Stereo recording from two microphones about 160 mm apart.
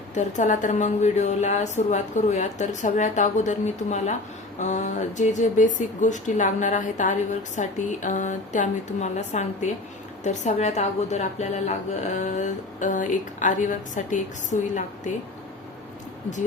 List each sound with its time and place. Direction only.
0.1 s speech: 50° left (ahead or behind)